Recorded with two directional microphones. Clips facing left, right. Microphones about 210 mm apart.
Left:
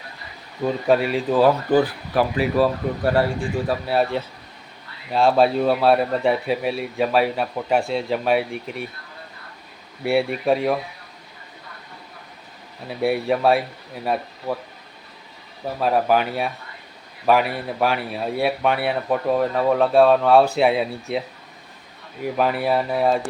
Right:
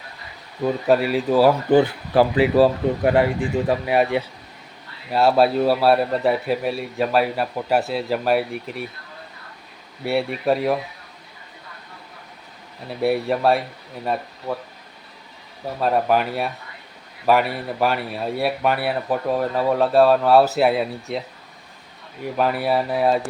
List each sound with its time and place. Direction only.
0.6 s speech: centre (ahead or behind)
1.7 s speech: 25° right (ahead or behind)
3.0 s speech: 15° right (ahead or behind); by 8.9 s centre (ahead or behind)
10.0 s speech: centre (ahead or behind)
12.9 s speech: centre (ahead or behind)
15.8 s speech: centre (ahead or behind)